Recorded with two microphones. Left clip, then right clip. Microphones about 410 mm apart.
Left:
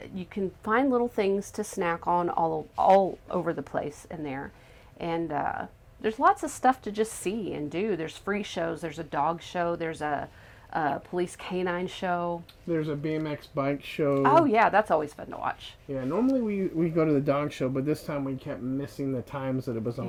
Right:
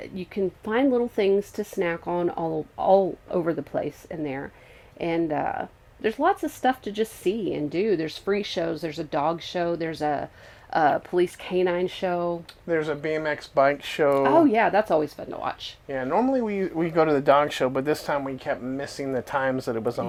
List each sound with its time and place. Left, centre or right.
0.0 s speech: left
6.4 s speech: left
12.6 s speech: right
14.3 s speech: left
16.0 s speech: right